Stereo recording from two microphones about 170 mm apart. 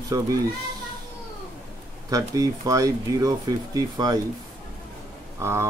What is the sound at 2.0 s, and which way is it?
Speech, 20° right (ahead or behind).